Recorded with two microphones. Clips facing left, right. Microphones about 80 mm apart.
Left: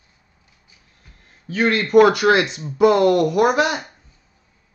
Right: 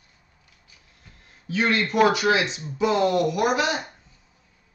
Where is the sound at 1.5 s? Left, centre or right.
Left.